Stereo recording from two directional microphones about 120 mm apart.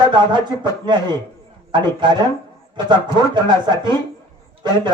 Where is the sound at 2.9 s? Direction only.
40° right (ahead or behind).